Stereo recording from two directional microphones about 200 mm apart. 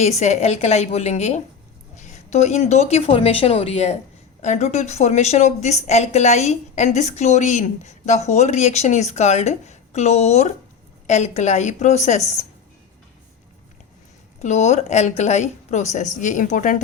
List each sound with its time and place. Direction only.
0.0 s a woman's voice: 35° left (ahead or behind)
14.4 s a woman's voice: 35° left (ahead or behind)